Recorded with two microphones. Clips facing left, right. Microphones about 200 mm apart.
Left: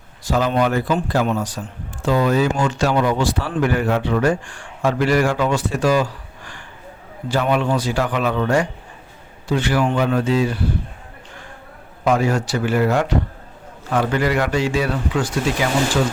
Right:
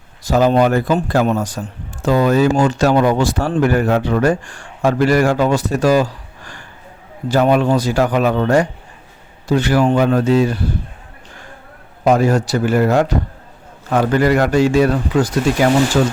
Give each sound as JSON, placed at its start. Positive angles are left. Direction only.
{"t": 0.3, "sound": "a man's voice", "side_deg": -40}
{"t": 12.0, "sound": "a man's voice", "side_deg": -40}